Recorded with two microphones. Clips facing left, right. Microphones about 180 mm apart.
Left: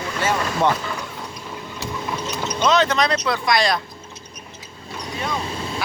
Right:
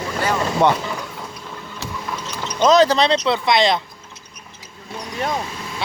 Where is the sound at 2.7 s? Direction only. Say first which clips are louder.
Right 5 dB; 35° right (ahead or behind).